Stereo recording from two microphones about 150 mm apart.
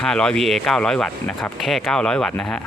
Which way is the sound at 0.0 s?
5° left (ahead or behind).